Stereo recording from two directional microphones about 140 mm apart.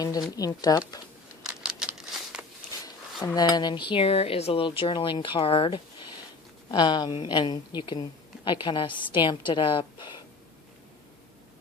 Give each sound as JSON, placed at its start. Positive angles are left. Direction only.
{"t": 0.0, "sound": "speech", "side_deg": 25}
{"t": 1.5, "sound": "crumpling", "side_deg": -5}
{"t": 3.3, "sound": "speech", "side_deg": 30}